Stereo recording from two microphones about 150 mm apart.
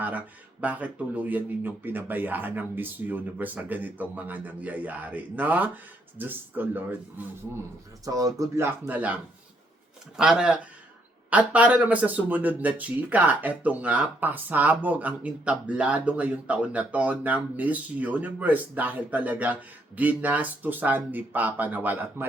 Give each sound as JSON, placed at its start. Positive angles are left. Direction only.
{"t": 0.6, "sound": "speech", "side_deg": -10}
{"t": 8.0, "sound": "speech", "side_deg": -25}
{"t": 10.2, "sound": "speech", "side_deg": -5}